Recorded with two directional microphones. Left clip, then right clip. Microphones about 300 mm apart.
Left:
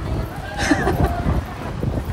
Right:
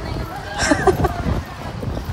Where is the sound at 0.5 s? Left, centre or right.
Centre.